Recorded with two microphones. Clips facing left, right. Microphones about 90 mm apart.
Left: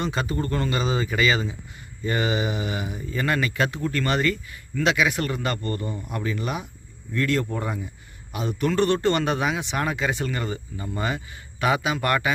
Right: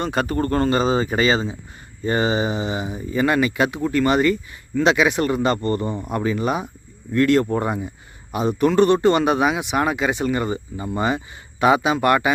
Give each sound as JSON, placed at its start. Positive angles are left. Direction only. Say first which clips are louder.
{"t": 0.0, "sound": "speech", "louder": "right 5 dB", "side_deg": -50}
{"t": 7.1, "sound": "speech", "louder": "right 8 dB", "side_deg": -55}
{"t": 7.4, "sound": "speech", "louder": "right 7 dB", "side_deg": -45}
{"t": 8.3, "sound": "a man's voice", "louder": "right 7 dB", "side_deg": -30}
{"t": 8.6, "sound": "speech", "louder": "right 6 dB", "side_deg": -20}